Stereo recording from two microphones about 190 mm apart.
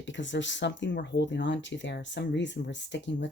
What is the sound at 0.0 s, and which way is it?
Speech, 70° left (ahead or behind).